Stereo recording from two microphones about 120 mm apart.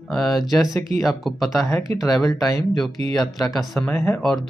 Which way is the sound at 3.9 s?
20° left (ahead or behind).